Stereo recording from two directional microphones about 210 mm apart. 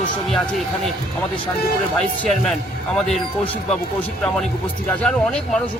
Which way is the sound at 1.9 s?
Centre (ahead or behind).